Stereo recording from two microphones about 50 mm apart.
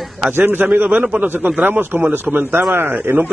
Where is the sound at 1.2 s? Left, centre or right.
Right.